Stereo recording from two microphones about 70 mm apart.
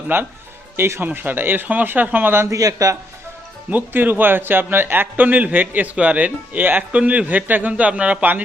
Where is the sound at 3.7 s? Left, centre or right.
Right.